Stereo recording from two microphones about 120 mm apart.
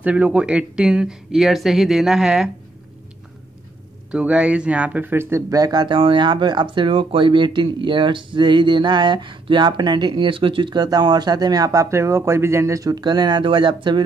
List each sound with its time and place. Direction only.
0.0 s speech: 10° right (ahead or behind)
4.1 s speech: 10° right (ahead or behind); by 14.0 s 40° right (ahead or behind)